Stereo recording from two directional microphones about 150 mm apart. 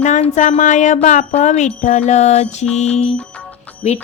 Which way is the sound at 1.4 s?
50° left (ahead or behind).